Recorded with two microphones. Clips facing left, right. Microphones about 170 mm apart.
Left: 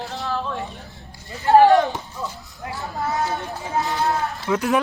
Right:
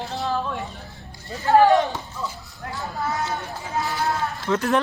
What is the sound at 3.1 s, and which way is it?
Run, 20° left (ahead or behind).